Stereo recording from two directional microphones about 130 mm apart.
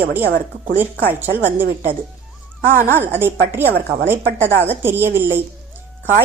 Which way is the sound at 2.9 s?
15° right (ahead or behind).